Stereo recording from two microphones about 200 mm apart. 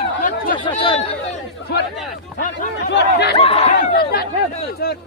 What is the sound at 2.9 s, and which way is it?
Speech, 55° left (ahead or behind).